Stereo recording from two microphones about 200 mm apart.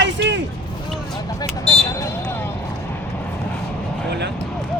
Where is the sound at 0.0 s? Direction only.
60° right (ahead or behind).